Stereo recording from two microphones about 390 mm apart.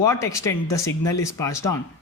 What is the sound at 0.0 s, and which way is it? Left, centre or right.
Speech, centre.